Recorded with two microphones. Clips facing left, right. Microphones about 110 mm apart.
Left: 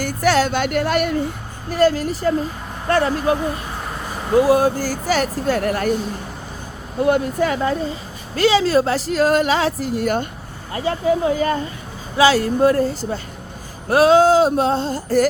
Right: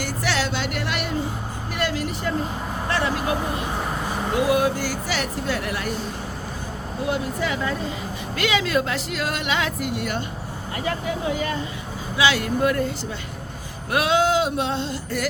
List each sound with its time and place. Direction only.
0.0 s speech: 45° left (ahead or behind)
4.4 s speech: 35° left (ahead or behind)
7.0 s speech: 50° left (ahead or behind)
10.8 s speech: 30° left (ahead or behind)